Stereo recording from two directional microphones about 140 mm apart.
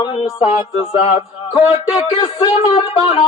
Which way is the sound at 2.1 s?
40° left (ahead or behind).